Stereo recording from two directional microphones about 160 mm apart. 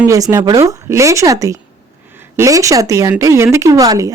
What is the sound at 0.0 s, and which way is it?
Speech, 20° right (ahead or behind).